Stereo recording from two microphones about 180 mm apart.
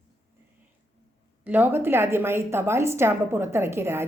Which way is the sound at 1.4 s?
10° right (ahead or behind).